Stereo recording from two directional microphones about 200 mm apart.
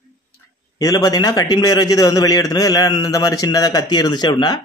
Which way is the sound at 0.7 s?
15° left (ahead or behind).